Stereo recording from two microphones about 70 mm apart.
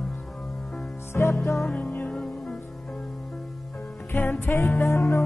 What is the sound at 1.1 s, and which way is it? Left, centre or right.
Music, left.